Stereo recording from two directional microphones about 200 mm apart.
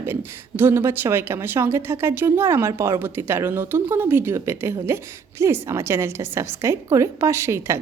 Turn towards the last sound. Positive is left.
turn(degrees=-15)  # may be behind; listen again after turning